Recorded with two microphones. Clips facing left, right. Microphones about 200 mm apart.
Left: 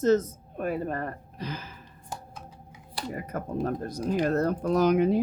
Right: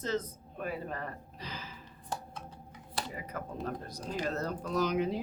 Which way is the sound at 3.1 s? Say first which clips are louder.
Left 7 dB; 50° left (ahead or behind).